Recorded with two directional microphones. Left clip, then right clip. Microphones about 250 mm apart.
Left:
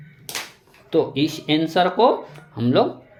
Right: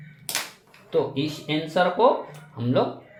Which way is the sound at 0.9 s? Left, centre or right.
Left.